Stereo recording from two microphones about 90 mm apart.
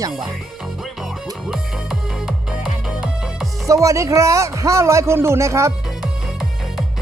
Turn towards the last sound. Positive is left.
turn(degrees=-30)  # may be behind; listen again after turning